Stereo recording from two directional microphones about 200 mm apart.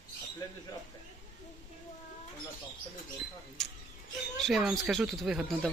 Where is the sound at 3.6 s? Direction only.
Centre (ahead or behind).